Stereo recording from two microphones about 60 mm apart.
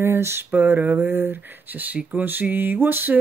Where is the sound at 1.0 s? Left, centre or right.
Right.